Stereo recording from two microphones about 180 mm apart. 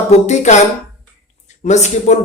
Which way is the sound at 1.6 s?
40° left (ahead or behind).